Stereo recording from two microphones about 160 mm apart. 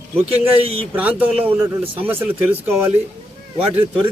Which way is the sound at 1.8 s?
35° right (ahead or behind).